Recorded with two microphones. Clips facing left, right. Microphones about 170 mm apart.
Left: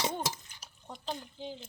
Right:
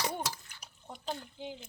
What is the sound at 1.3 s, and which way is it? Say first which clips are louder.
Speech: left 1 dB; 10° right (ahead or behind).